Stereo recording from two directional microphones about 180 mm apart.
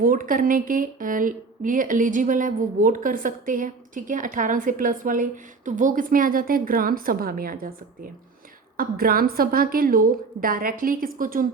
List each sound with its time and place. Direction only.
0.0 s speech: 50° right (ahead or behind)